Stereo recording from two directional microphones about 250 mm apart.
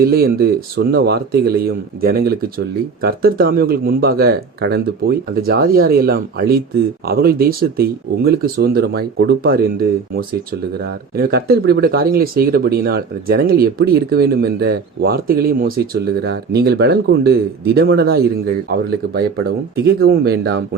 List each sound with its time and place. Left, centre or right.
0.0 s speech: right
10.8 s speech: right